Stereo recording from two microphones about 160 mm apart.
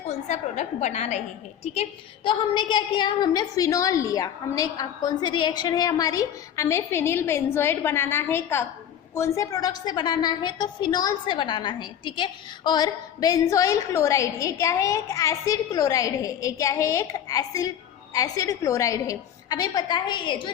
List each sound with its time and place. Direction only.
0.1 s a woman's voice: 45° left (ahead or behind); by 20.5 s 30° left (ahead or behind)